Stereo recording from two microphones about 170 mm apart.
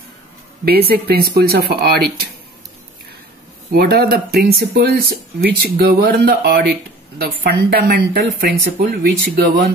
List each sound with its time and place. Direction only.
0.7 s speech: 65° right (ahead or behind)
3.7 s speech: 65° right (ahead or behind)